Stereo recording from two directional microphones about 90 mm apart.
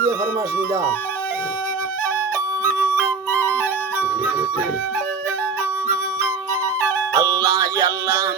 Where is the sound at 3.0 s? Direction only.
30° right (ahead or behind).